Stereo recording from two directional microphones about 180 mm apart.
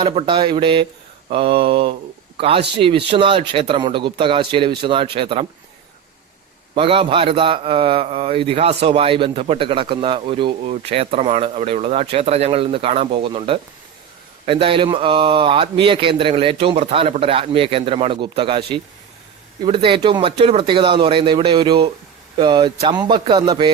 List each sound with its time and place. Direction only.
0.0 s a man's voice: 30° right (ahead or behind)
6.7 s a man's voice: 30° right (ahead or behind)